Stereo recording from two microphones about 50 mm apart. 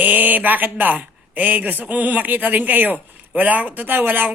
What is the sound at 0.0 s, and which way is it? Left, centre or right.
Speech, right.